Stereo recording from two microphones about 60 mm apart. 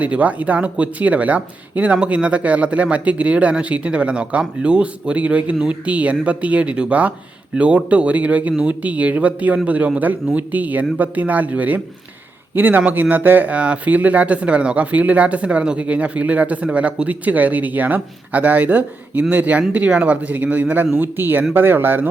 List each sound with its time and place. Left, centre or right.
0.0 s a man's voice: right